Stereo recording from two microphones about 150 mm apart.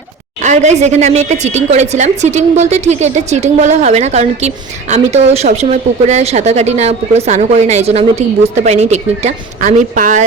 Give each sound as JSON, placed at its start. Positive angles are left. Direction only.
{"t": 0.4, "sound": "a woman's voice", "side_deg": -50}